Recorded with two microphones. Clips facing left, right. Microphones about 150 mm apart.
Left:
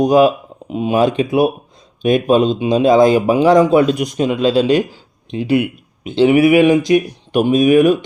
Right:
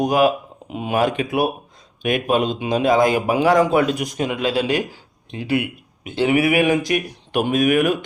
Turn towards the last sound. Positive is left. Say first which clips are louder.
# left 7 dB
turn(degrees=25)  # may be behind; listen again after turning